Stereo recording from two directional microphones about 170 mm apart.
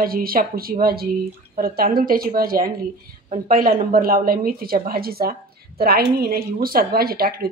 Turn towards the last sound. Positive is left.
turn(degrees=-60)  # may be behind; listen again after turning